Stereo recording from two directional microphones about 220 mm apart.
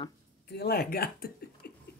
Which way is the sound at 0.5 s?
45° left (ahead or behind).